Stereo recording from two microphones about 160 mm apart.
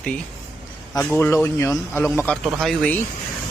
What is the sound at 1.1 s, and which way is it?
Speech, 15° left (ahead or behind).